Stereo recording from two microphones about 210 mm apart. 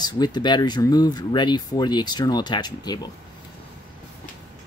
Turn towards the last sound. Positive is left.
turn(degrees=20)  # may be behind; listen again after turning